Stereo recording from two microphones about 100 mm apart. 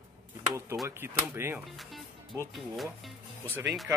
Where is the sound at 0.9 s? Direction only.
25° right (ahead or behind).